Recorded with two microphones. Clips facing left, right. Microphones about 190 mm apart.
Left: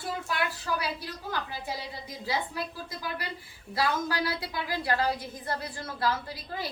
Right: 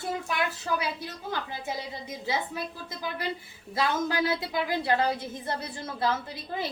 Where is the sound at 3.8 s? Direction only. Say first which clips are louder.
Right 2 dB; 25° right (ahead or behind).